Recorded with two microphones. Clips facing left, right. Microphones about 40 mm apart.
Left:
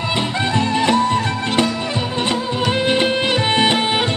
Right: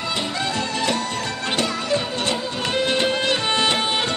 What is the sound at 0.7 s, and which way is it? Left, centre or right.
Music, left.